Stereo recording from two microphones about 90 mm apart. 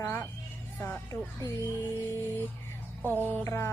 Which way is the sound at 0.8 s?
25° left (ahead or behind).